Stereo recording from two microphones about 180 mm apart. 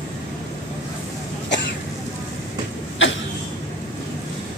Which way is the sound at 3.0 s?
90° left.